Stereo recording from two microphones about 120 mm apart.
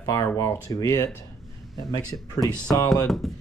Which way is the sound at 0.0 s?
30° left (ahead or behind).